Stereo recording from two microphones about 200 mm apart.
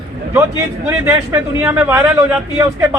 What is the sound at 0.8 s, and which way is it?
Speech, 15° right (ahead or behind).